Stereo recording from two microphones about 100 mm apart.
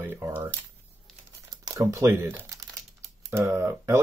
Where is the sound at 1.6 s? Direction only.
30° right (ahead or behind).